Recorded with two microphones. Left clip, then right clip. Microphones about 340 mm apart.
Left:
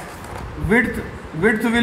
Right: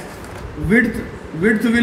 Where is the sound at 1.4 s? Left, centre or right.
Left.